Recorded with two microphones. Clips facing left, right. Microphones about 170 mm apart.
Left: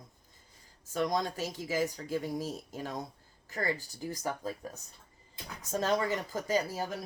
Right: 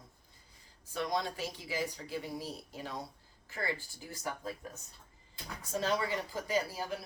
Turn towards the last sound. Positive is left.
turn(degrees=45)  # may be behind; listen again after turning